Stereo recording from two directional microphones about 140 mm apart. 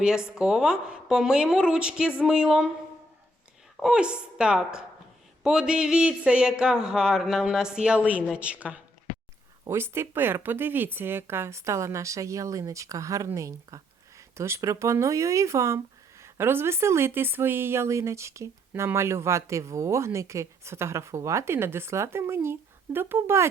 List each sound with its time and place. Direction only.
0.0 s speech: 5° right (ahead or behind)
3.8 s a woman's voice: 5° right (ahead or behind)